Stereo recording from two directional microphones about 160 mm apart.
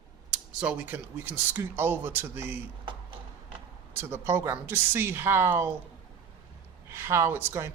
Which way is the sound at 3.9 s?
15° right (ahead or behind).